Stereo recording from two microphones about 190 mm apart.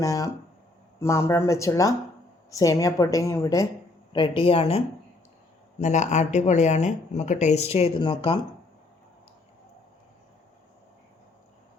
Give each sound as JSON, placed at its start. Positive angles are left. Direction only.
{"t": 0.0, "sound": "a woman's voice", "side_deg": 15}
{"t": 4.1, "sound": "speech", "side_deg": 25}
{"t": 5.8, "sound": "speech", "side_deg": 40}